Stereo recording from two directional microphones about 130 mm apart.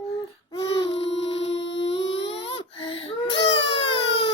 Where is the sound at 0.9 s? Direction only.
45° left (ahead or behind).